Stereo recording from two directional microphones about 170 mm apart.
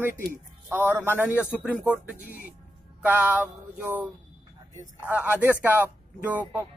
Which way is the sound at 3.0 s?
10° right (ahead or behind).